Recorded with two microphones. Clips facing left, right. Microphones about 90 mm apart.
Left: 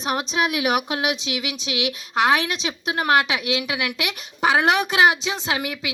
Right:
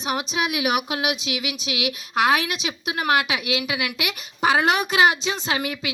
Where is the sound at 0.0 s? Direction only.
35° left (ahead or behind).